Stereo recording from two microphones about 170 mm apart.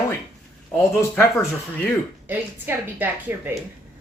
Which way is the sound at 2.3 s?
10° right (ahead or behind).